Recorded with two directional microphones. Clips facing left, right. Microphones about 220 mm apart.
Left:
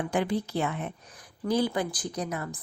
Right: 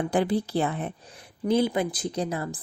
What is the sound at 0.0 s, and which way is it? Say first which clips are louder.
A woman's voice: right 3 dB; 35° right (ahead or behind).